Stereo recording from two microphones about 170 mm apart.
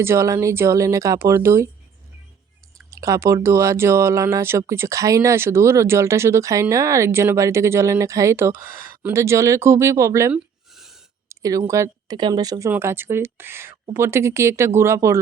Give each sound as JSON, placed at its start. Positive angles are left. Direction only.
{"t": 0.0, "sound": "speech", "side_deg": -15}
{"t": 2.7, "sound": "speech", "side_deg": -20}
{"t": 10.3, "sound": "a sound", "side_deg": 0}
{"t": 11.3, "sound": "speech", "side_deg": -20}